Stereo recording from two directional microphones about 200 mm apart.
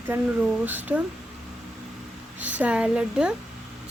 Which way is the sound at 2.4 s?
10° right (ahead or behind).